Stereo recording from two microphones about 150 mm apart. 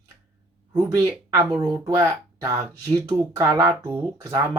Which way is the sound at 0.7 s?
20° right (ahead or behind).